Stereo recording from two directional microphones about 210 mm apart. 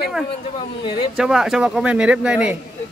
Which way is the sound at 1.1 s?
5° right (ahead or behind).